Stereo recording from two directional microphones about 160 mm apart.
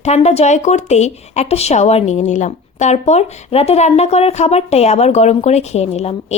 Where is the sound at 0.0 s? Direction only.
40° left (ahead or behind).